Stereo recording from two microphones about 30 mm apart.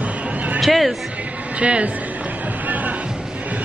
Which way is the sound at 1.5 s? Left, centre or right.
Right.